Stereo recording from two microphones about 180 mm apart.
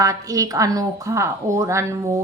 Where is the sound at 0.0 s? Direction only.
20° right (ahead or behind).